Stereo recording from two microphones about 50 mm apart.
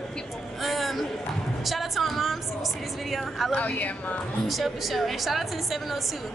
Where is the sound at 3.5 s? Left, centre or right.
Left.